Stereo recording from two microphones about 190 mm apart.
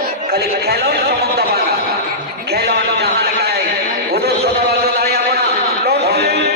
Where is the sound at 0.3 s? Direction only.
55° right (ahead or behind).